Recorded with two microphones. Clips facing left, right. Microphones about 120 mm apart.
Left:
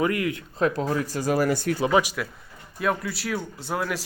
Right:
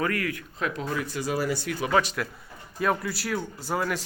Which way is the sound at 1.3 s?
50° left (ahead or behind).